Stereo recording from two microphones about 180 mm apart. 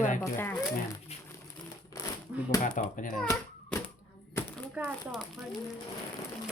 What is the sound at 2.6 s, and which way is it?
Speech, 45° left (ahead or behind).